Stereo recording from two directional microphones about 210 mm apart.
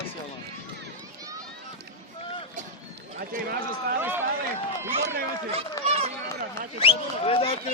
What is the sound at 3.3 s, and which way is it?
Speech, 45° right (ahead or behind).